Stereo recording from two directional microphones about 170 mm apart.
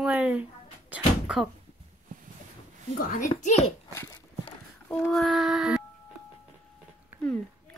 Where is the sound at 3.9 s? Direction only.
15° left (ahead or behind).